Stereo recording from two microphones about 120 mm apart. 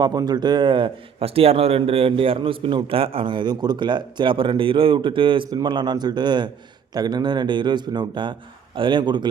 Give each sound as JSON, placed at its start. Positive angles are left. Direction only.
{"t": 0.0, "sound": "a man's voice", "side_deg": -35}